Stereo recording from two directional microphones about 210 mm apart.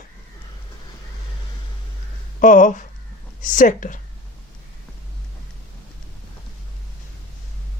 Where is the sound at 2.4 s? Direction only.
35° left (ahead or behind).